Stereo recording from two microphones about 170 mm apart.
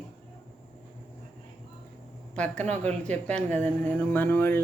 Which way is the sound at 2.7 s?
40° right (ahead or behind).